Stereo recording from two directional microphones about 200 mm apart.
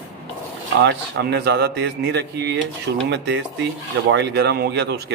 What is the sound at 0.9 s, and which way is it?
Speech, 55° right (ahead or behind).